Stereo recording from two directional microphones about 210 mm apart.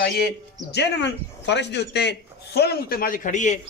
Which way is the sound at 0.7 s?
55° left (ahead or behind).